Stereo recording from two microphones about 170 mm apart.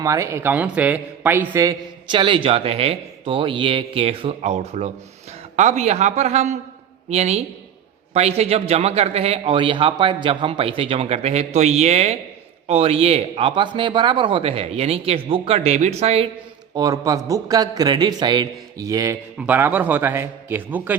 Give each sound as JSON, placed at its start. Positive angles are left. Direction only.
{"t": 0.0, "sound": "a man's voice", "side_deg": -20}
{"t": 16.7, "sound": "a man's voice", "side_deg": -20}